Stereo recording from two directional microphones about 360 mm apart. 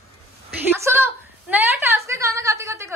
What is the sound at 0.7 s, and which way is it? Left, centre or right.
A woman's voice, centre.